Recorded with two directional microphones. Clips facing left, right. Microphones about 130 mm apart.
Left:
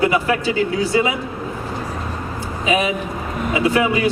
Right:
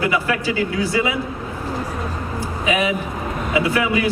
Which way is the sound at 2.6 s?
25° left (ahead or behind).